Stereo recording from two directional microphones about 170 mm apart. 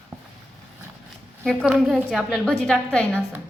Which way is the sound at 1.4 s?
Centre (ahead or behind).